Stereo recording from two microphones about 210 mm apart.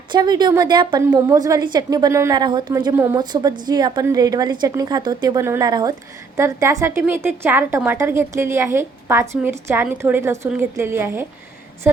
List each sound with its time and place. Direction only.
0.1 s a woman's voice: 20° right (ahead or behind)